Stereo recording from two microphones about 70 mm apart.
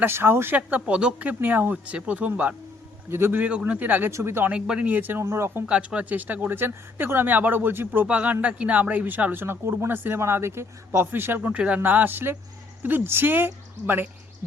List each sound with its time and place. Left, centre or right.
0.0 s speech: right
0.5 s speech: centre
3.1 s speech: right
3.4 s speech: centre
4.1 s speech: right
4.5 s speech: centre
4.9 s speech: right
5.2 s speech: right
5.6 s speech: centre; by 8.0 s right
8.0 s speech: centre